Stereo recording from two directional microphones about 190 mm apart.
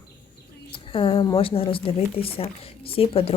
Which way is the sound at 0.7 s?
25° left (ahead or behind).